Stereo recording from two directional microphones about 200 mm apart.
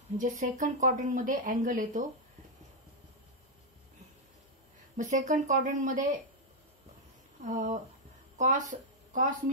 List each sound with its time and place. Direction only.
0.2 s speech: 40° right (ahead or behind)
4.9 s speech: 40° right (ahead or behind)
7.4 s speech: 40° right (ahead or behind)